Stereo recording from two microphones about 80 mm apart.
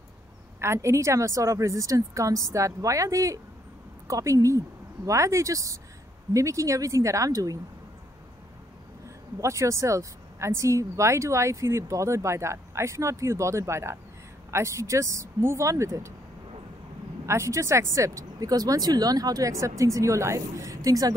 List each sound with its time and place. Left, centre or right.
0.6 s speech: right
9.4 s speech: right
17.3 s speech: right